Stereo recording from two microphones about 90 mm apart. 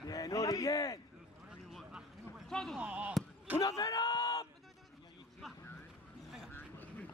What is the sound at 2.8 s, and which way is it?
Speech, 20° right (ahead or behind).